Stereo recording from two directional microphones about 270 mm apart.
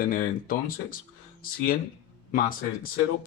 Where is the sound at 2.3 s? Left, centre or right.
Left.